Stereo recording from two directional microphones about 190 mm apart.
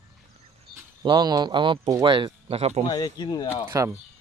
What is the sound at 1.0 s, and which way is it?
Speech, 25° right (ahead or behind).